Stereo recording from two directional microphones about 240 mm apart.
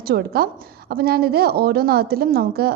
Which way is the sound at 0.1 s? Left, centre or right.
Right.